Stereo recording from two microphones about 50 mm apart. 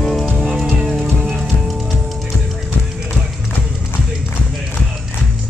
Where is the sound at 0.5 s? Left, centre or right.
Centre.